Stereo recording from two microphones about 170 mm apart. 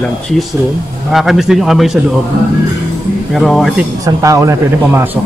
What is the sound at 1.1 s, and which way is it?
Speech, centre (ahead or behind).